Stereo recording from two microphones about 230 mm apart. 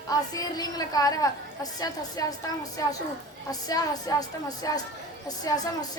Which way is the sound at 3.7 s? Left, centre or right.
Centre.